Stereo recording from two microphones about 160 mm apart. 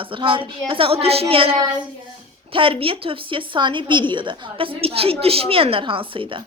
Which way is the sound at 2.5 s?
35° right (ahead or behind).